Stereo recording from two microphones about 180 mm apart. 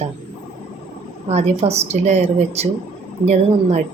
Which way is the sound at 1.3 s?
35° right (ahead or behind).